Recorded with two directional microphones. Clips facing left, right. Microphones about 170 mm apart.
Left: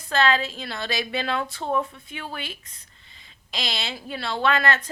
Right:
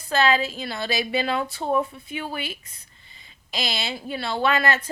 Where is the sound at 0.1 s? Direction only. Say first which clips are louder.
Right 1 dB; 5° right (ahead or behind).